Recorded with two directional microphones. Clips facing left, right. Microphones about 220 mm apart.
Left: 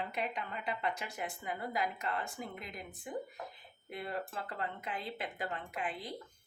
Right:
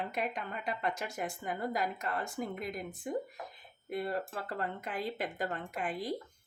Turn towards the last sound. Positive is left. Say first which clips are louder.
# right 4 dB
turn(degrees=-45)  # may be behind; listen again after turning